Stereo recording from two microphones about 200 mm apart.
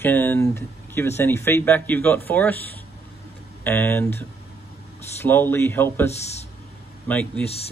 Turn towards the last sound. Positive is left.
turn(degrees=5)  # may be behind; listen again after turning